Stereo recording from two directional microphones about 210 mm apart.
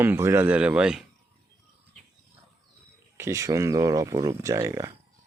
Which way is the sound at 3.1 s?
15° right (ahead or behind).